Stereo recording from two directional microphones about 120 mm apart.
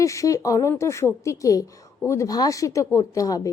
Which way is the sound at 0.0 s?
25° left (ahead or behind).